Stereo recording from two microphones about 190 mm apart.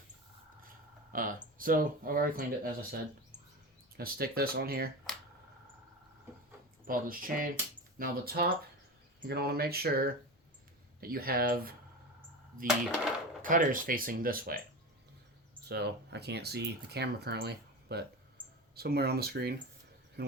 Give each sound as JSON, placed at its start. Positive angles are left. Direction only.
{"t": 1.1, "sound": "speech", "side_deg": -45}
{"t": 6.8, "sound": "speech", "side_deg": -50}
{"t": 13.4, "sound": "speech", "side_deg": -45}
{"t": 15.7, "sound": "speech", "side_deg": -60}
{"t": 20.2, "sound": "cricket", "side_deg": -55}